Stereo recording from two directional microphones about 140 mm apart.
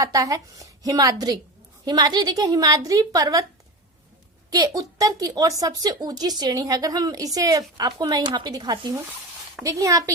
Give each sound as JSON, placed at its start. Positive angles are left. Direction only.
{"t": 0.0, "sound": "a woman's voice", "side_deg": -25}
{"t": 4.5, "sound": "a woman's voice", "side_deg": -25}